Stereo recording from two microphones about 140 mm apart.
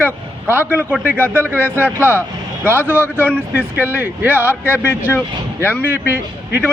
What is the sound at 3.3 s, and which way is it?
A man's voice, 10° right (ahead or behind).